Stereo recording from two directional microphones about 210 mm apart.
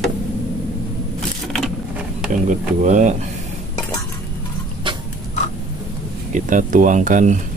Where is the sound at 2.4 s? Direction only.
35° right (ahead or behind).